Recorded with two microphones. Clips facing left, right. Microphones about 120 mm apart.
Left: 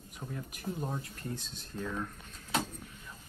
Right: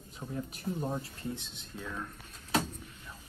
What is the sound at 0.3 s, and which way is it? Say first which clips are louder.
Speech: right 3 dB; 30° right (ahead or behind).